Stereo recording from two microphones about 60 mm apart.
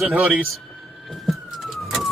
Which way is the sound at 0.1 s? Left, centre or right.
Right.